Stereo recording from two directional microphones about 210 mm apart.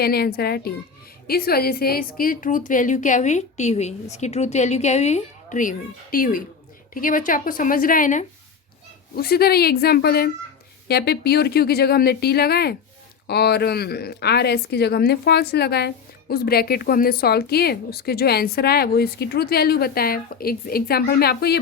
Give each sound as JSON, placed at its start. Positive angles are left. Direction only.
{"t": 0.0, "sound": "a woman's voice", "side_deg": 45}